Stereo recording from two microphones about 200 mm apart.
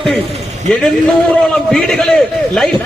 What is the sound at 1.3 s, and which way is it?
A man's voice, 5° left (ahead or behind).